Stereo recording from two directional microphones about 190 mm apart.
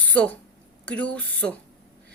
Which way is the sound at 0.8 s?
5° left (ahead or behind).